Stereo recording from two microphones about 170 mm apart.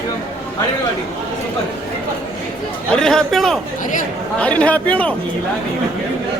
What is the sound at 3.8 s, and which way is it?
Speech, 50° left (ahead or behind).